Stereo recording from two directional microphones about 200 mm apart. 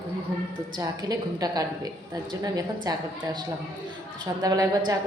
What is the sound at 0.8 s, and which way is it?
A woman's voice, 20° right (ahead or behind).